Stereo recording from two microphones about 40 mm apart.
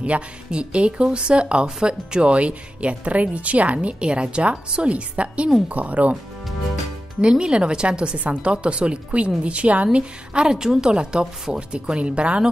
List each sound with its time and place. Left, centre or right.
0.0 s speech: right
7.2 s speech: right